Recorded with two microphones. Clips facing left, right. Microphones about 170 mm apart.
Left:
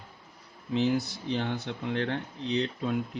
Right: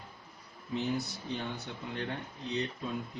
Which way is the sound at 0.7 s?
90° left.